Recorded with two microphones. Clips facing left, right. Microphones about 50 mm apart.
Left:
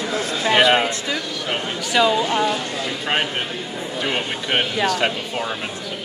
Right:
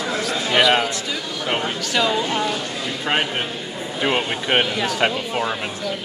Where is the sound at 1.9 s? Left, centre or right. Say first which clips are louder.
Left 4 dB; centre.